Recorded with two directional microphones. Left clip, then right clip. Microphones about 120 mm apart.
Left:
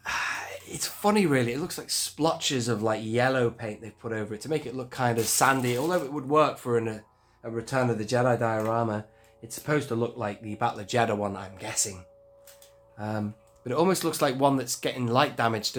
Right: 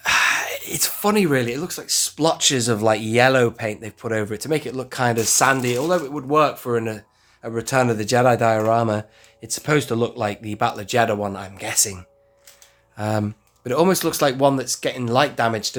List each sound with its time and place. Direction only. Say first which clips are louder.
0.0 s whispering: right 12 dB; 65° right (ahead or behind); by 1.0 s 45° right (ahead or behind)
1.0 s speech: right 4 dB; 25° right (ahead or behind)
7.4 s speech: right 8 dB; 80° right; by 11.9 s 45° right (ahead or behind)
13.0 s speech: right 10 dB; 70° right (ahead or behind)
13.7 s speech: right 7 dB; 35° right (ahead or behind)